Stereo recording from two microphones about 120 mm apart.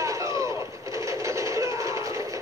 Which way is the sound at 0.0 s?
25° right (ahead or behind).